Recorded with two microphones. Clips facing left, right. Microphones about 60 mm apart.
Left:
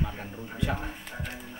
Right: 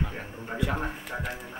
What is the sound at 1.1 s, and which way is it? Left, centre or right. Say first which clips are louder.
Speech: right 5 dB; right.